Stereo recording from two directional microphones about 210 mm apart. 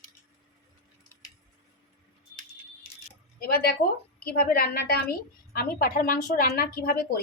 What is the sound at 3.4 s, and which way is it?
A woman's voice, 50° left (ahead or behind).